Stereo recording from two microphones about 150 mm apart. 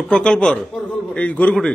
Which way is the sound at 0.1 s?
5° left (ahead or behind).